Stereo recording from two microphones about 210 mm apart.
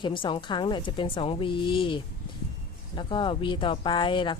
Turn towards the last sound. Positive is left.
turn(degrees=20)  # may be behind; listen again after turning